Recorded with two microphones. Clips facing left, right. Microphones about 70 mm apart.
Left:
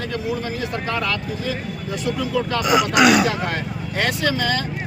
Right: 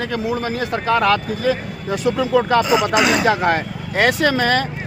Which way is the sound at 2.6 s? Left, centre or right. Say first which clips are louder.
Right 1 dB; right.